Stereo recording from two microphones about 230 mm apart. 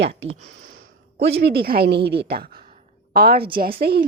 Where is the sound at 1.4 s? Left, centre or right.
Right.